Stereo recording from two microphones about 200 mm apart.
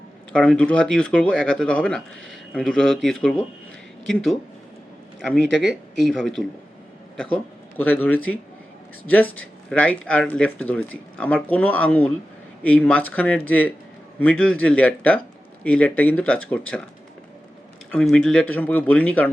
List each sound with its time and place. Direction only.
0.3 s speech: 5° left (ahead or behind)
5.5 s speech: 60° right (ahead or behind)
6.0 s speech: centre (ahead or behind)
17.9 s speech: 5° left (ahead or behind)